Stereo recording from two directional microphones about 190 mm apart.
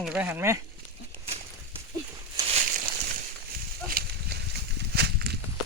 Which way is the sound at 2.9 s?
50° right (ahead or behind).